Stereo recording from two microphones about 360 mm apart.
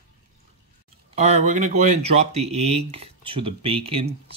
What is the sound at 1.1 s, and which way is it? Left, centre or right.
Speech, centre.